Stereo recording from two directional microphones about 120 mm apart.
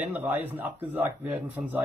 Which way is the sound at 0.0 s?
10° right (ahead or behind).